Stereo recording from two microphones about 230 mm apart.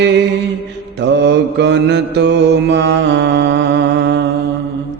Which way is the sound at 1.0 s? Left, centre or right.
Right.